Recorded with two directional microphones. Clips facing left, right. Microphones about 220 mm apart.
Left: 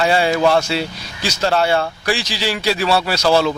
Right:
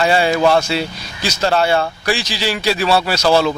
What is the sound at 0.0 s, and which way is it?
A man's voice, 15° right (ahead or behind).